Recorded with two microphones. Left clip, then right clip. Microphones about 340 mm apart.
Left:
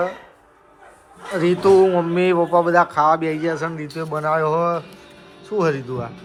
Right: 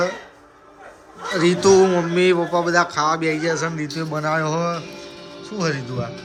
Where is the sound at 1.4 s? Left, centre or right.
Centre.